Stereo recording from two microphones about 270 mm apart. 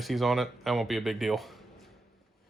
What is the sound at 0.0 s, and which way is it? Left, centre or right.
Speech, centre.